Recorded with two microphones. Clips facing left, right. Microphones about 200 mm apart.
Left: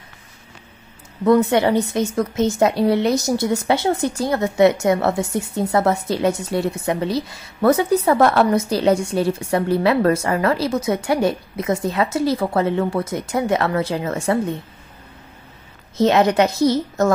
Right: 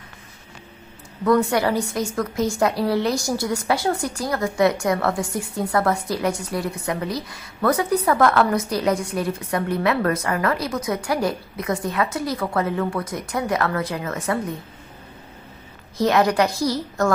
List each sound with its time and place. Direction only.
1.2 s a woman's voice: 25° left (ahead or behind)
16.0 s a woman's voice: 25° left (ahead or behind)